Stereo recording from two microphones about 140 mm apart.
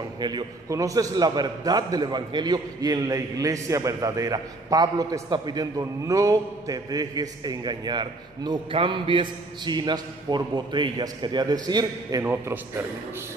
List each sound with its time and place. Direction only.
0.2 s a man's voice: 30° right (ahead or behind)